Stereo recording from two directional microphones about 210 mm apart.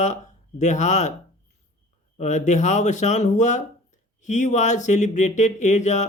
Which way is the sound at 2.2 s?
35° left (ahead or behind).